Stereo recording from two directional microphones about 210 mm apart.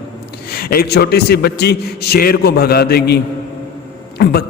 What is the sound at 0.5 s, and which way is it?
A man's voice, 45° left (ahead or behind).